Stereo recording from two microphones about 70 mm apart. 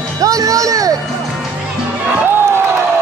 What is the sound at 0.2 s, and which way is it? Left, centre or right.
Music, right.